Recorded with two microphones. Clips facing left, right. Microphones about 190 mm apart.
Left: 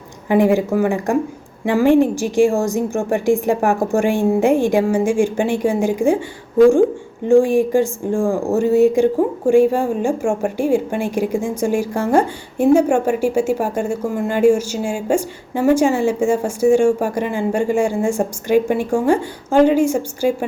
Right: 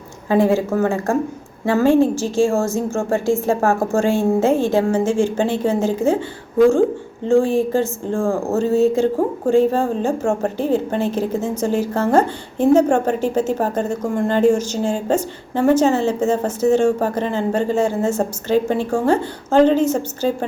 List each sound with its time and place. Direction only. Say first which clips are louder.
0.3 s a woman's voice: left 1 dB; 15° left (ahead or behind)
7.3 s a woman's voice: left 3 dB; 15° left (ahead or behind)